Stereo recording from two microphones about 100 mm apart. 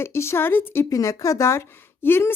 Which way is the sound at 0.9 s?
35° left (ahead or behind).